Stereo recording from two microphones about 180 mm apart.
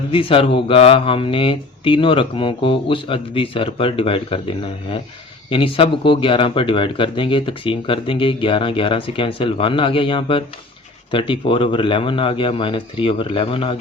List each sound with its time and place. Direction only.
0.1 s speech: 30° left (ahead or behind)